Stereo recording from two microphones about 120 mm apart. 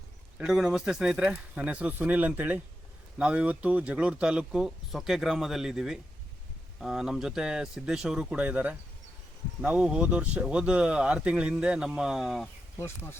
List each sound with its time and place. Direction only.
0.3 s speech: 5° right (ahead or behind)